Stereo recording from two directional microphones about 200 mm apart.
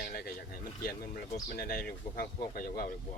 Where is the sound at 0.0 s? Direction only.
45° left (ahead or behind).